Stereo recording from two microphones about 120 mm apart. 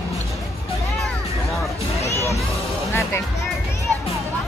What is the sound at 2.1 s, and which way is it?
Music, 25° left (ahead or behind).